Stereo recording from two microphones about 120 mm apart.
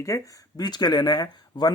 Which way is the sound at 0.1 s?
25° left (ahead or behind).